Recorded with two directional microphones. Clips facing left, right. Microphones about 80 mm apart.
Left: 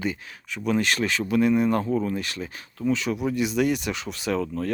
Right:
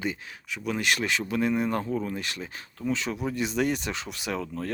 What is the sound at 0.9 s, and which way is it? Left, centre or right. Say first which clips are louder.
Speech: left 4 dB; centre.